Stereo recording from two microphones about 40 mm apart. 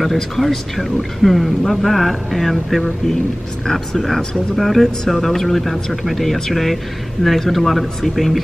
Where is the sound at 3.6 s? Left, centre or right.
Centre.